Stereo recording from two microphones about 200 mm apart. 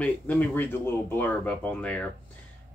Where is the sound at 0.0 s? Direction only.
10° left (ahead or behind).